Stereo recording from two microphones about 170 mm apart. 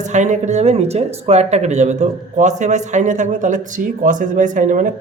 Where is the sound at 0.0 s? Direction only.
45° right (ahead or behind).